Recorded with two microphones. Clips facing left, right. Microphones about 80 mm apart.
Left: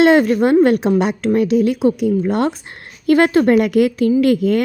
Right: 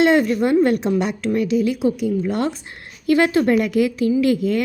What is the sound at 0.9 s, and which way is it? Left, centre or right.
A woman's voice, left.